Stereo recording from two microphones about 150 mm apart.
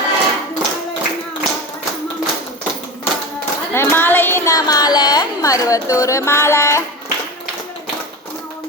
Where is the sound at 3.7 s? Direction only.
15° left (ahead or behind).